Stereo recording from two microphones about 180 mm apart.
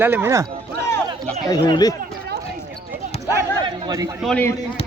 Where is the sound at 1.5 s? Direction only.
20° left (ahead or behind).